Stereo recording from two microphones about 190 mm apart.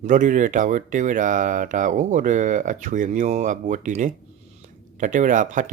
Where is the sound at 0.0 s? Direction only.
40° right (ahead or behind).